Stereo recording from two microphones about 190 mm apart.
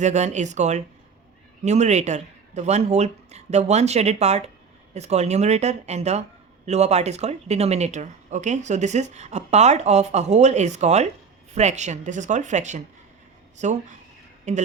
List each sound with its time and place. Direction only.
0.0 s speech: 35° right (ahead or behind)